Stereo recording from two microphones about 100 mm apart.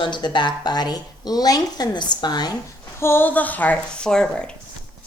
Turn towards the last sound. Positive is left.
turn(degrees=5)  # may be behind; listen again after turning